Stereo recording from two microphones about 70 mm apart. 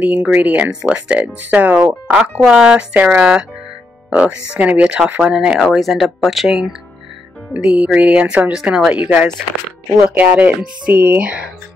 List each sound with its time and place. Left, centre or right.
0.0 s speech: right
2.1 s speech: centre
5.6 s speech: centre
7.5 s speech: centre
8.9 s speech: right